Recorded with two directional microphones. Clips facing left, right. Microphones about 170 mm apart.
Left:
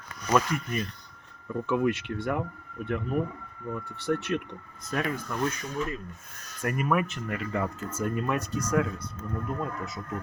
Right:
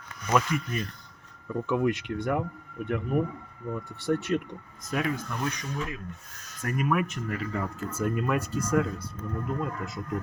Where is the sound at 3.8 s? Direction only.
65° left (ahead or behind).